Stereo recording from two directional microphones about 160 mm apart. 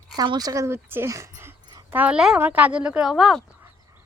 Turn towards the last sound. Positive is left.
turn(degrees=0)  # may be behind; listen again after turning